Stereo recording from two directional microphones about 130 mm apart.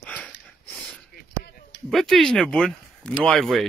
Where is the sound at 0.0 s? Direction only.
10° left (ahead or behind).